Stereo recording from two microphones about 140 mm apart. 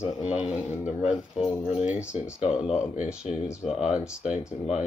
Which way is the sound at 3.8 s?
5° right (ahead or behind).